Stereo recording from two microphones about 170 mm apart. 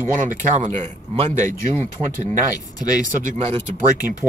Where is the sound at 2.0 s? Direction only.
5° right (ahead or behind).